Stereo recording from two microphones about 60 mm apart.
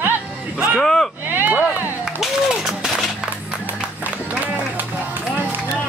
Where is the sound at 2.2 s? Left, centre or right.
Centre.